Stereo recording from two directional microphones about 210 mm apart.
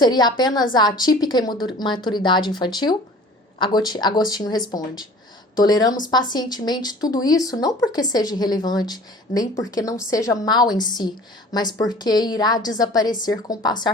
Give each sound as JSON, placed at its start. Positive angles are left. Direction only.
{"t": 0.0, "sound": "speech", "side_deg": 20}